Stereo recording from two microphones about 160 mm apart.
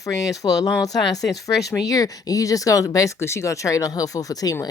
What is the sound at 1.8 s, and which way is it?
Speech, 20° left (ahead or behind).